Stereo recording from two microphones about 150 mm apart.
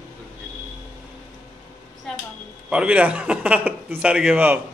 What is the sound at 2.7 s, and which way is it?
Speech, 10° right (ahead or behind).